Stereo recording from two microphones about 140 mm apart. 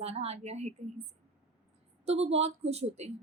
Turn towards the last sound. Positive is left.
turn(degrees=-50)  # may be behind; listen again after turning